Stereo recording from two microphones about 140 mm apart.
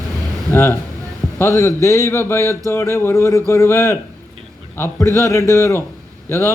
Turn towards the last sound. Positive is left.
turn(degrees=20)  # may be behind; listen again after turning